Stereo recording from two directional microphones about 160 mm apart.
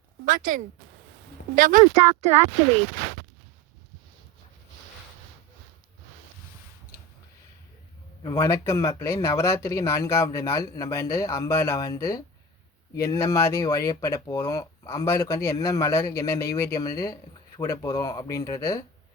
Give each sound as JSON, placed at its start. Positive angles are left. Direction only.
{"t": 0.3, "sound": "speech", "side_deg": -55}
{"t": 8.2, "sound": "speech", "side_deg": 20}